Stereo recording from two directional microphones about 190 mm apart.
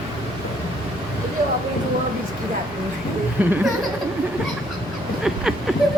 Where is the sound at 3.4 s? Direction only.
10° right (ahead or behind).